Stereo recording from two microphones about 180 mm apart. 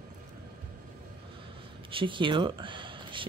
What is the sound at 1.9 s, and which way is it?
Speech, 30° right (ahead or behind).